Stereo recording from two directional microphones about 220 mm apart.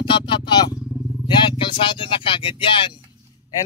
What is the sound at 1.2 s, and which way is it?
Speech, 20° left (ahead or behind).